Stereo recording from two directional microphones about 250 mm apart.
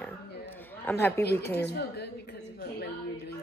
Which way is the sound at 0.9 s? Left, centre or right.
Centre.